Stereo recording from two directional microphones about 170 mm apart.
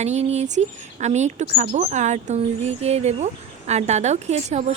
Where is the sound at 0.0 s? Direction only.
40° right (ahead or behind).